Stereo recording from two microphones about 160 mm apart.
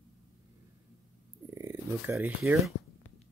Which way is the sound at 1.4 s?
20° right (ahead or behind).